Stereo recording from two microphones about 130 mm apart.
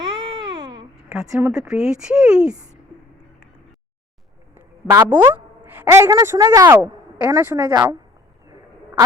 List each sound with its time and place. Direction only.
0.0 s baby cry: 40° right (ahead or behind)
1.4 s speech: 10° right (ahead or behind)
4.5 s a woman's voice: 20° right (ahead or behind)